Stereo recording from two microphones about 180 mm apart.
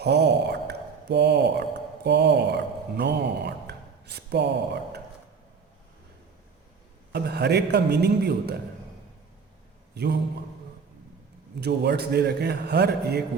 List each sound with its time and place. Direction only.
0.0 s speech: 70° right (ahead or behind)
3.0 s a sound: 65° right (ahead or behind)
7.1 s a man's voice: 65° right (ahead or behind)
9.9 s a man's voice: 60° right (ahead or behind)
11.6 s a man's voice: 65° right (ahead or behind)